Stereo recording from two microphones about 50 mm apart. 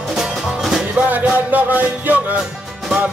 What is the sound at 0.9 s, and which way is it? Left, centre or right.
Music, right.